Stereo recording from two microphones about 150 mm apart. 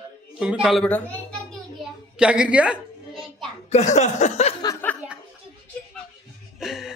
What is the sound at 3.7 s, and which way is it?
Speech, 50° left (ahead or behind).